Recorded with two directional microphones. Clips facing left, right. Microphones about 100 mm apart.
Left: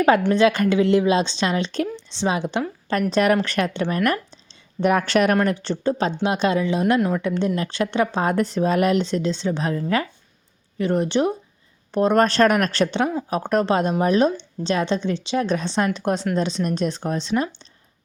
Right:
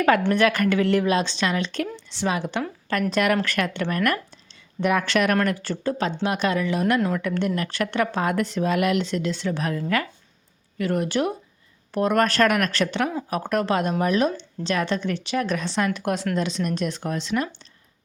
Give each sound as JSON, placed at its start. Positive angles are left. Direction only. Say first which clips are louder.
{"t": 0.3, "sound": "a woman's voice", "louder": "left 3 dB", "side_deg": 20}